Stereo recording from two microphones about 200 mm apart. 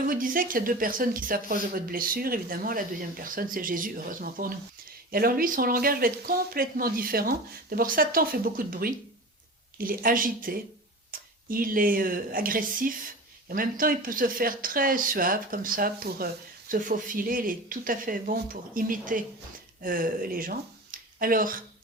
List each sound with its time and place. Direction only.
0.0 s speech: 45° right (ahead or behind)